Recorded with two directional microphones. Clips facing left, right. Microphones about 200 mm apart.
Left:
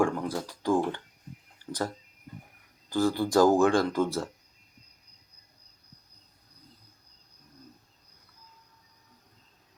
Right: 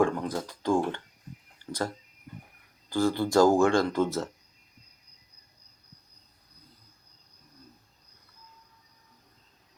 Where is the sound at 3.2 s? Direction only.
15° left (ahead or behind).